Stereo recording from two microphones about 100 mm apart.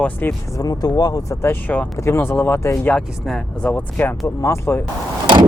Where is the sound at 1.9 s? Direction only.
30° left (ahead or behind).